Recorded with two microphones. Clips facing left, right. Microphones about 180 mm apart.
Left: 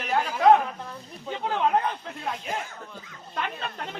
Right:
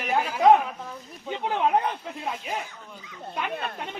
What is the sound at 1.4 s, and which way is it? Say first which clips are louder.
Speech: right 1 dB; 15° right (ahead or behind).